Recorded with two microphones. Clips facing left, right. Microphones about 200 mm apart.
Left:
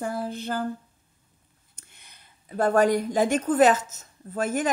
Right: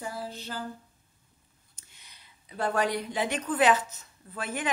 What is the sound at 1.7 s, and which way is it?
A woman's voice, 55° left (ahead or behind).